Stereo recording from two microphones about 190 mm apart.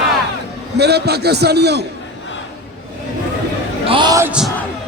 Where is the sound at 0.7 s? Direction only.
60° right (ahead or behind).